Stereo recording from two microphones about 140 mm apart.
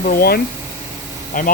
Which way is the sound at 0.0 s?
90° left.